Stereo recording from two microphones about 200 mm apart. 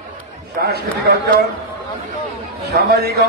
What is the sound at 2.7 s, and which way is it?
Speech, 50° right (ahead or behind).